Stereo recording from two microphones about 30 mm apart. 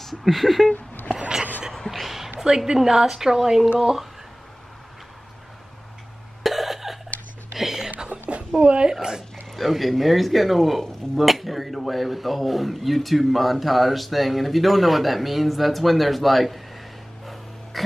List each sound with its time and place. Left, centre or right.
0.0 s speech: centre
1.9 s a sound: centre
2.4 s a woman's voice: right
6.4 s cough: centre
7.5 s music: centre
8.5 s a woman's voice: right
9.6 s speech: centre
17.7 s throat clearing: centre